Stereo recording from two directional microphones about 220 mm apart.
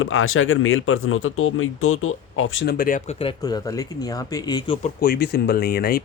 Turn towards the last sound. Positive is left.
turn(degrees=45)  # may be behind; listen again after turning